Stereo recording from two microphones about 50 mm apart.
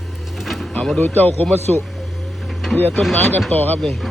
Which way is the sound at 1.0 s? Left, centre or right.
Left.